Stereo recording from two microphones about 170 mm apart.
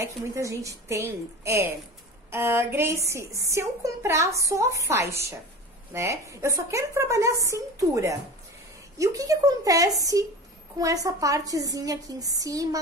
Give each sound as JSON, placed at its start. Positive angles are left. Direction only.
{"t": 0.0, "sound": "a woman's voice", "side_deg": -20}